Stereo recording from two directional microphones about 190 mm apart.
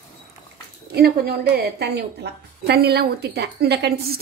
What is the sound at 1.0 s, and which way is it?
A woman's voice, 55° right (ahead or behind).